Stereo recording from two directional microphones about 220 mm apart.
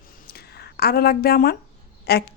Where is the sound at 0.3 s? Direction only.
45° left (ahead or behind).